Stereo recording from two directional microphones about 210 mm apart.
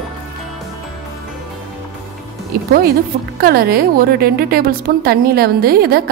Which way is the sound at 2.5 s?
45° right (ahead or behind).